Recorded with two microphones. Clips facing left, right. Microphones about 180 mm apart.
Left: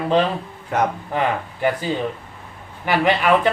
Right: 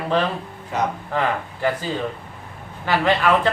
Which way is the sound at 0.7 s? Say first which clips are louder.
Left 3 dB; 55° left (ahead or behind).